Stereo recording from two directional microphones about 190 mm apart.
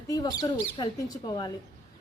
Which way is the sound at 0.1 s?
20° left (ahead or behind).